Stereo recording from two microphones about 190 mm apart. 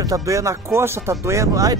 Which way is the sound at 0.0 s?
15° right (ahead or behind).